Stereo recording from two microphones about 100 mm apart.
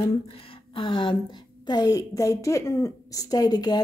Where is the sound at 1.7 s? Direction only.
40° left (ahead or behind).